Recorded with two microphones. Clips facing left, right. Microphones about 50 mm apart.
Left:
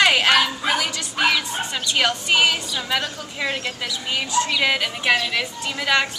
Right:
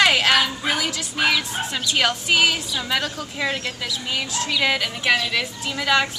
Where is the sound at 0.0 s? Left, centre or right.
Centre.